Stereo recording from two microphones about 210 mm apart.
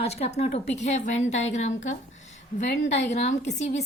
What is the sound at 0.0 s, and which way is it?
A woman's voice, 30° left (ahead or behind).